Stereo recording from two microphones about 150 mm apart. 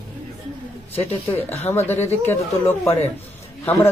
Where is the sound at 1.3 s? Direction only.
15° left (ahead or behind).